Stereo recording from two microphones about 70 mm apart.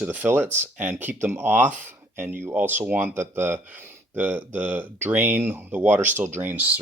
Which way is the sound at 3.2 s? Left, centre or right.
Right.